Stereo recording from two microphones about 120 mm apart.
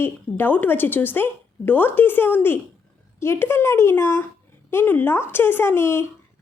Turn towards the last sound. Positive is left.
turn(degrees=20)  # may be behind; listen again after turning